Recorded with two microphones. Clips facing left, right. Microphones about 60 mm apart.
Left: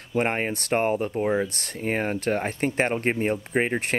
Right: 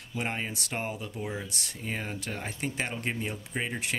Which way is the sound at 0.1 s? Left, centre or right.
Left.